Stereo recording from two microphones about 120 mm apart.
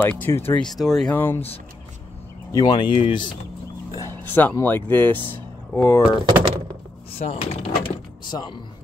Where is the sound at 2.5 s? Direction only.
35° left (ahead or behind).